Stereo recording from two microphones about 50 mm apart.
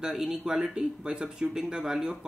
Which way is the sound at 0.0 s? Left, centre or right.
Centre.